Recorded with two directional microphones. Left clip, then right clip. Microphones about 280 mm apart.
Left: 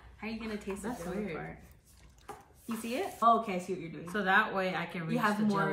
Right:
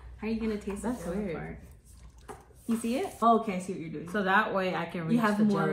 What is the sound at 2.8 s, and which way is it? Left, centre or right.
A woman's voice, centre.